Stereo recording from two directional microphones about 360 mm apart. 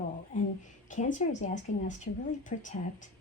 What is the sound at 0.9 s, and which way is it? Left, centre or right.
Speech, centre.